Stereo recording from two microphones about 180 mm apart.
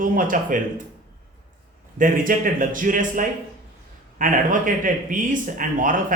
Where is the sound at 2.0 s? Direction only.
50° right (ahead or behind).